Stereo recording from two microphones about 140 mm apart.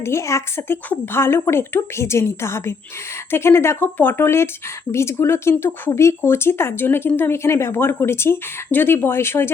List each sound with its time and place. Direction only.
0.0 s speech: 20° left (ahead or behind)